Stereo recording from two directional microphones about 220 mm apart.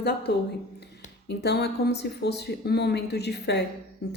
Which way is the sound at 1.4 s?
50° left (ahead or behind).